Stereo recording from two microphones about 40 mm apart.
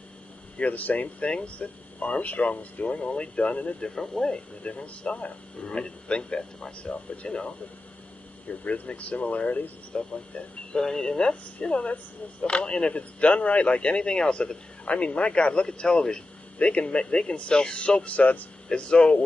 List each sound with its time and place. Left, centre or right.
0.6 s speech: left
1.2 s speech: left
3.8 s speech: centre
8.5 s speech: left
10.7 s speech: centre
11.6 s speech: left
18.7 s speech: left